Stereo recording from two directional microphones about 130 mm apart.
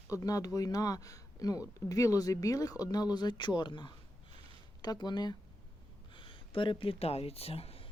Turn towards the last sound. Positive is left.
turn(degrees=50)  # may be behind; listen again after turning